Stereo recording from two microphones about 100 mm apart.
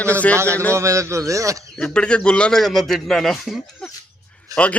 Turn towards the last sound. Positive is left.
turn(degrees=15)  # may be behind; listen again after turning